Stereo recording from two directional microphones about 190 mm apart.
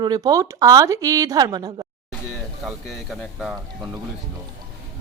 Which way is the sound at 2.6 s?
Centre (ahead or behind).